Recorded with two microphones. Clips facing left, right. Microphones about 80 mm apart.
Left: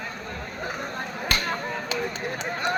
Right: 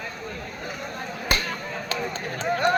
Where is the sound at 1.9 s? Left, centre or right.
Centre.